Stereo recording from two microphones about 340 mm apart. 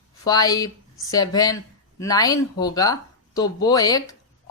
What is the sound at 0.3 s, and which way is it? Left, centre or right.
Speech, centre.